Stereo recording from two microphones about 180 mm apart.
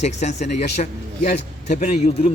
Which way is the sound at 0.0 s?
40° left (ahead or behind).